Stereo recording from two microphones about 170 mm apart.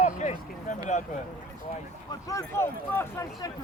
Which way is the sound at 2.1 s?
20° left (ahead or behind).